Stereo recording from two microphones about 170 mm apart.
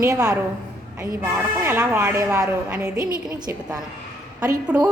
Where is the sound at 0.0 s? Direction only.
20° right (ahead or behind).